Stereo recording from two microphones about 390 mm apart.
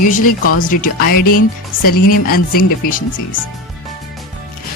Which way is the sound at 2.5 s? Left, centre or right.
Left.